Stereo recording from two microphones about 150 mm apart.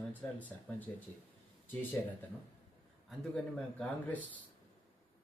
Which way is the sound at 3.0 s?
5° left (ahead or behind).